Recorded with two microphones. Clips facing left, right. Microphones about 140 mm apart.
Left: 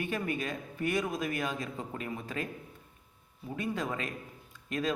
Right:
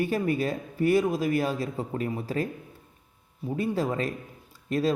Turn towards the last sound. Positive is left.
turn(degrees=-35)  # may be behind; listen again after turning